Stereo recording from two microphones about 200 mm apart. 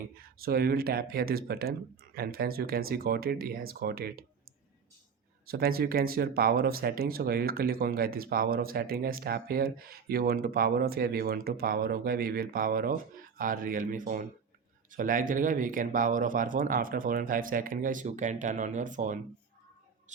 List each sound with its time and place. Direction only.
0.2 s speech: 50° right (ahead or behind)
5.5 s speech: 50° right (ahead or behind)